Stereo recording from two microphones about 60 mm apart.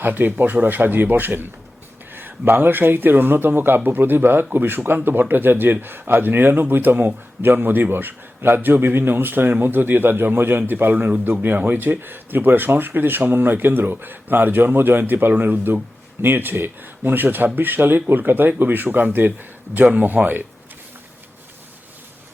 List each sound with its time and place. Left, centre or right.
0.0 s speech: right